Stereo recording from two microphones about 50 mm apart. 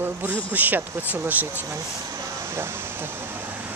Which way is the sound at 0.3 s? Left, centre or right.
Right.